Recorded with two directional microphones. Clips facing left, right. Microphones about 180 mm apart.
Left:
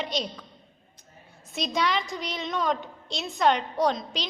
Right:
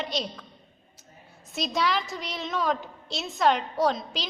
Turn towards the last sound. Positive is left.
turn(degrees=-5)  # may be behind; listen again after turning